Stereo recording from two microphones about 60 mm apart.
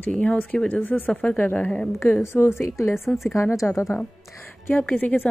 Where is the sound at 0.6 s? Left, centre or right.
Left.